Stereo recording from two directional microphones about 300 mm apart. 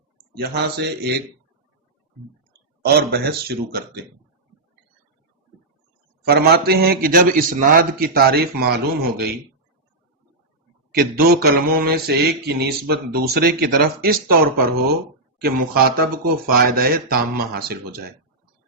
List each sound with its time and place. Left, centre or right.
0.3 s mantra: right
2.8 s mantra: right
6.2 s mantra: right
10.9 s mantra: right